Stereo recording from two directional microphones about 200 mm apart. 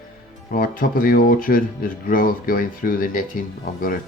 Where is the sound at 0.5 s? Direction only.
45° left (ahead or behind).